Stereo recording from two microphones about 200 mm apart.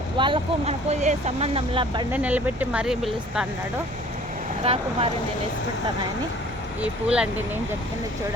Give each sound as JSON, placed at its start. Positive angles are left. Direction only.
{"t": 0.2, "sound": "speech", "side_deg": -30}
{"t": 2.1, "sound": "speech", "side_deg": -10}
{"t": 4.6, "sound": "speech", "side_deg": -30}
{"t": 6.8, "sound": "speech", "side_deg": -5}